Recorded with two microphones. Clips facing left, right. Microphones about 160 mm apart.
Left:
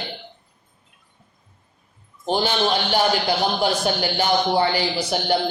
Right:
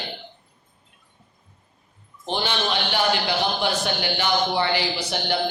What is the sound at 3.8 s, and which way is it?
Speech, 40° left (ahead or behind).